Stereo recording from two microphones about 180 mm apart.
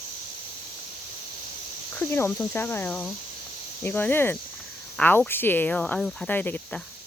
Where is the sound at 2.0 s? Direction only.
10° left (ahead or behind).